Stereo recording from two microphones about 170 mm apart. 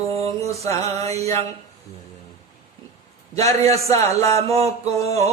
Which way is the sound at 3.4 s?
20° left (ahead or behind).